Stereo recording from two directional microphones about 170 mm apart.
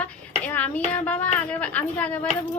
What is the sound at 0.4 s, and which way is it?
Speech, 10° left (ahead or behind).